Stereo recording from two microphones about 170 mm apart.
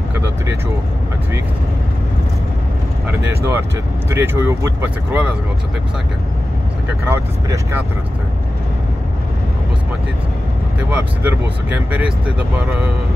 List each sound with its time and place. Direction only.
0.1 s vehicle: 15° right (ahead or behind)
3.1 s speech: 15° right (ahead or behind)
7.1 s speech: 15° right (ahead or behind)
10.8 s speech: 10° right (ahead or behind)